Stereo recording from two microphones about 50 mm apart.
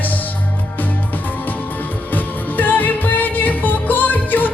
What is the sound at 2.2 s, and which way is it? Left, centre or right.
Music, left.